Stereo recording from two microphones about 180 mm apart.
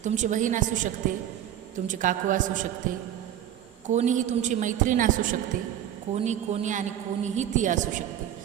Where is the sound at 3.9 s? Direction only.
40° right (ahead or behind).